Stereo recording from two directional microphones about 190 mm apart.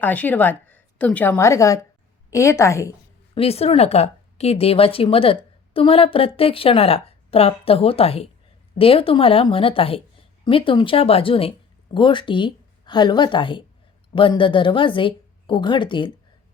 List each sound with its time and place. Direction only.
0.0 s a woman's voice: 10° left (ahead or behind)
3.3 s speech: 30° left (ahead or behind)